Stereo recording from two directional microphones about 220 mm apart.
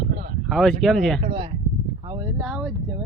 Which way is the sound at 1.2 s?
25° right (ahead or behind).